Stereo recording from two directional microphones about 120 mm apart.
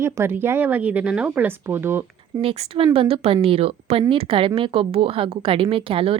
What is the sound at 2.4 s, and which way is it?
A woman's voice, 55° right (ahead or behind).